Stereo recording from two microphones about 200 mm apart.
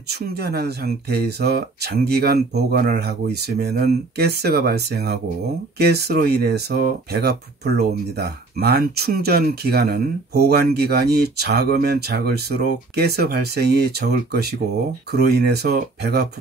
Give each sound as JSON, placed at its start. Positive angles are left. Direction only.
{"t": 0.1, "sound": "speech", "side_deg": -55}